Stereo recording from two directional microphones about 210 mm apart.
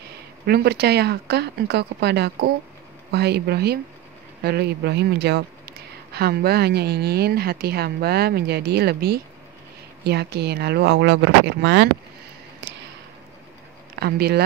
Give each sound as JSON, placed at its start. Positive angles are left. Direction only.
{"t": 0.5, "sound": "a woman's voice", "side_deg": -50}
{"t": 12.6, "sound": "a sound", "side_deg": -55}
{"t": 13.9, "sound": "speech", "side_deg": -50}